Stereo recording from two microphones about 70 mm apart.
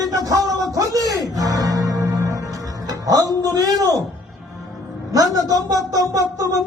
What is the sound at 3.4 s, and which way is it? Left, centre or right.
Speech, right.